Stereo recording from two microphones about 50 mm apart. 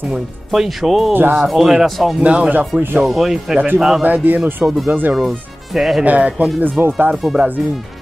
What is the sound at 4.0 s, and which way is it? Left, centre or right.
Speech, right.